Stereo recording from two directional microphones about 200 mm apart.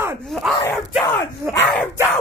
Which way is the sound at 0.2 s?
Centre (ahead or behind).